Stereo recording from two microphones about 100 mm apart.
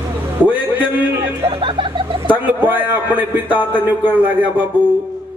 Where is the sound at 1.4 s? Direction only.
60° right (ahead or behind).